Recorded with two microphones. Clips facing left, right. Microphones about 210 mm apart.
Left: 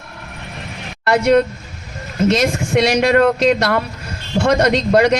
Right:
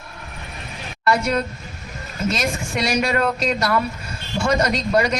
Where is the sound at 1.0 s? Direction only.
75° left (ahead or behind).